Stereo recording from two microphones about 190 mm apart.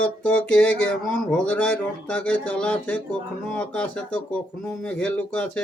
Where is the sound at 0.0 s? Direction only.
5° left (ahead or behind).